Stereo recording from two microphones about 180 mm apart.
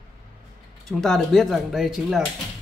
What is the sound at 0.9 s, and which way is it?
Speech, centre (ahead or behind).